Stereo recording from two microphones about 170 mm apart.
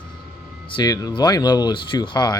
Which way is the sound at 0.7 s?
25° left (ahead or behind).